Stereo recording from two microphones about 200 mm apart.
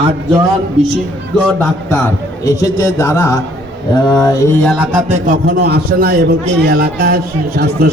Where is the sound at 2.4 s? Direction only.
15° left (ahead or behind).